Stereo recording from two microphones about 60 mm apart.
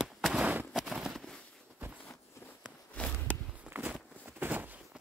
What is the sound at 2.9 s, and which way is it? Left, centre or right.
Walk, left.